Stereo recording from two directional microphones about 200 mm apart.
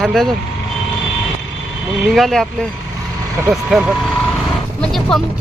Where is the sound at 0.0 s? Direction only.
Centre (ahead or behind).